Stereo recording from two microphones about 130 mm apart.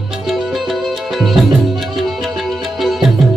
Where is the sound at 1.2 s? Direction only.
Centre (ahead or behind).